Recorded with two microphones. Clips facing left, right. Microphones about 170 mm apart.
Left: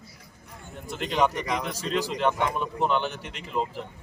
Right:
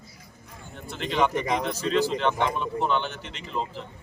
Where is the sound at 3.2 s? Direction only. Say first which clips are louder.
Left 1 dB; 55° left (ahead or behind).